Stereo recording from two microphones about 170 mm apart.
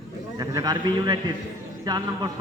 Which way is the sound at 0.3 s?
25° right (ahead or behind).